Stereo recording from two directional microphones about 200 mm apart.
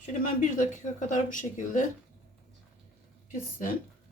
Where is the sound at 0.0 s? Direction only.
40° left (ahead or behind).